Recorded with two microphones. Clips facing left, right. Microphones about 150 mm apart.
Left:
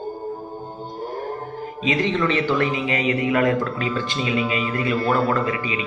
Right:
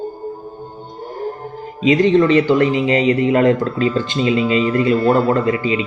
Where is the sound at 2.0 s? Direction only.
40° right (ahead or behind).